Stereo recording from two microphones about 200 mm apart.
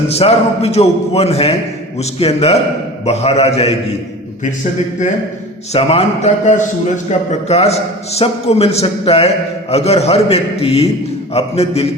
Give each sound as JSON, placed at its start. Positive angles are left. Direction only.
{"t": 0.1, "sound": "a man's voice", "side_deg": 30}
{"t": 5.7, "sound": "a man's voice", "side_deg": 30}